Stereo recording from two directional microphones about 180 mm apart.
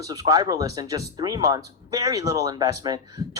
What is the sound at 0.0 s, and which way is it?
Speech, 20° right (ahead or behind).